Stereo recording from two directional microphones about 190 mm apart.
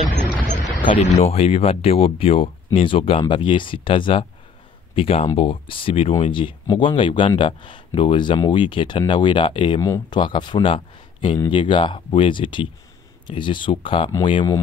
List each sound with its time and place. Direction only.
0.8 s speech: 30° left (ahead or behind)
9.8 s speech: 15° left (ahead or behind)